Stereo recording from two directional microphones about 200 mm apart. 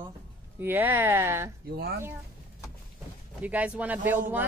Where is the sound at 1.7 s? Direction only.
55° right (ahead or behind).